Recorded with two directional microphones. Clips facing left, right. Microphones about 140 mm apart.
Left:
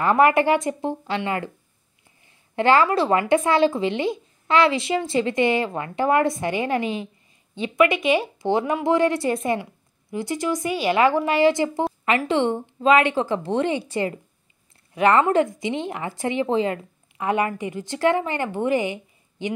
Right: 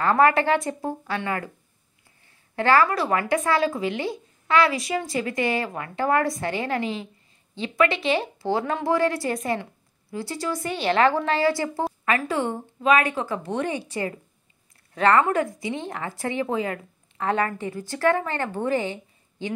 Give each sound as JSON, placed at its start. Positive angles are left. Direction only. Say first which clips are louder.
{"t": 0.0, "sound": "speech", "louder": "left 2 dB", "side_deg": 15}
{"t": 2.5, "sound": "speech", "louder": "left 2 dB", "side_deg": 20}
{"t": 17.2, "sound": "speech", "louder": "left 2 dB", "side_deg": 15}